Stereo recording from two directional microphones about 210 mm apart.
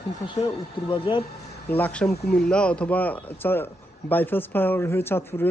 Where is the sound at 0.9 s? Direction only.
25° left (ahead or behind).